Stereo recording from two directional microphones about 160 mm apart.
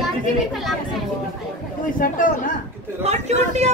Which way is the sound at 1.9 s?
55° left (ahead or behind).